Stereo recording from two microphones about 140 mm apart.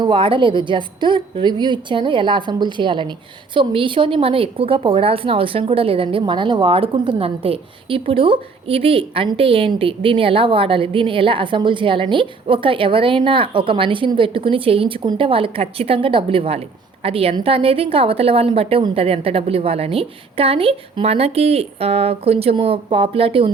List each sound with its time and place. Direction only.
0.0 s a woman's voice: 35° right (ahead or behind)